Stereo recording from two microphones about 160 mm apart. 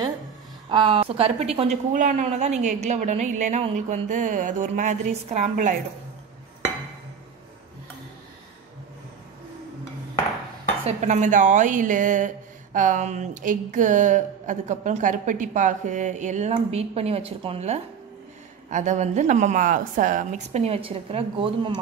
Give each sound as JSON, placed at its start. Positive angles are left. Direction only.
{"t": 0.7, "sound": "speech", "side_deg": -30}
{"t": 2.0, "sound": "speech", "side_deg": -50}
{"t": 10.9, "sound": "speech", "side_deg": -50}